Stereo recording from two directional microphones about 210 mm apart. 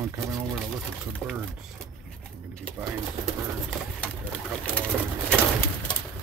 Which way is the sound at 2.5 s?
5° left (ahead or behind).